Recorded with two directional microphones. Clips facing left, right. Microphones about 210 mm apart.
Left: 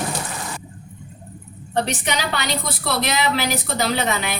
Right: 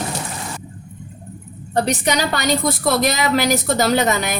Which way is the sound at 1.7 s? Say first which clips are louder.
Right 4 dB; 40° right (ahead or behind).